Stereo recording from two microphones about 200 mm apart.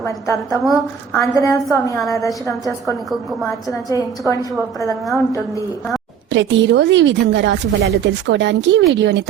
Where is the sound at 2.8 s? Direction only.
Centre (ahead or behind).